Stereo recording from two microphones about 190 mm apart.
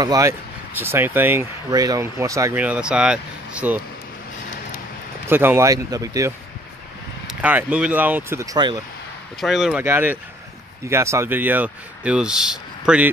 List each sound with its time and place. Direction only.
0.0 s speech: 15° right (ahead or behind)
5.3 s speech: 10° right (ahead or behind)
7.2 s speech: 10° right (ahead or behind)
9.4 s speech: centre (ahead or behind)